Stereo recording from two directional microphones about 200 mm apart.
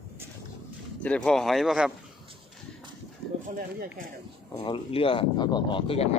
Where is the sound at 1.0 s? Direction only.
5° left (ahead or behind).